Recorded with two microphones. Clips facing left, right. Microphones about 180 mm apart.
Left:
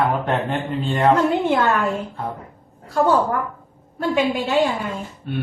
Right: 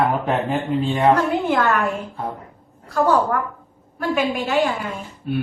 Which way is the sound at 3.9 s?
25° left (ahead or behind).